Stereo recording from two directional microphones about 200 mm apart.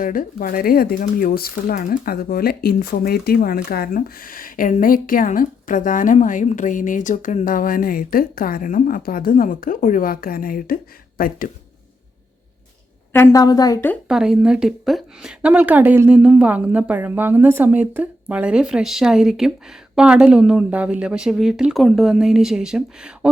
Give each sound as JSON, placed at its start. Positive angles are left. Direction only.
{"t": 0.0, "sound": "speech", "side_deg": 45}
{"t": 13.1, "sound": "a woman's voice", "side_deg": 15}
{"t": 13.9, "sound": "a woman's voice", "side_deg": -5}